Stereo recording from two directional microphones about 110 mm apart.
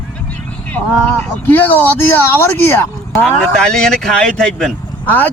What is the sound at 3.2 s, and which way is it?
Speech, 5° left (ahead or behind).